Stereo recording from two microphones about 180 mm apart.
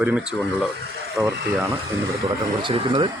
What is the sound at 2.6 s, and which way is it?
Speech, 25° right (ahead or behind).